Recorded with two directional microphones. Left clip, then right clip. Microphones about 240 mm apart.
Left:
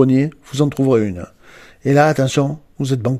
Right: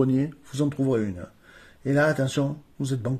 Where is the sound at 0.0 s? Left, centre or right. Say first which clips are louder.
Left 9 dB; left.